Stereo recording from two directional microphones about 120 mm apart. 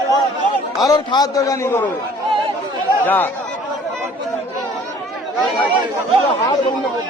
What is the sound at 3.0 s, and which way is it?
Speech, 15° left (ahead or behind).